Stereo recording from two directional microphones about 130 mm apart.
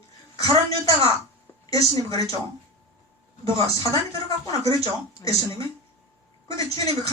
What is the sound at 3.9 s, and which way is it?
Speech, 25° left (ahead or behind).